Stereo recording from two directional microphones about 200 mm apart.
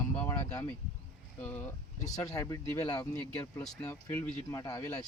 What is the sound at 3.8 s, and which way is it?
Speech, 15° left (ahead or behind).